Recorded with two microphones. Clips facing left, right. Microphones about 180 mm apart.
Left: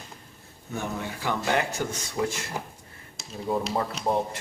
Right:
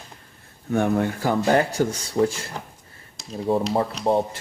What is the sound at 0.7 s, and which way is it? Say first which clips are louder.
Speech: right 11 dB; 55° right (ahead or behind).